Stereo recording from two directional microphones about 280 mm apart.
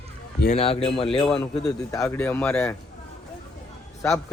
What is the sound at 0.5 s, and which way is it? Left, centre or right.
Speech, left.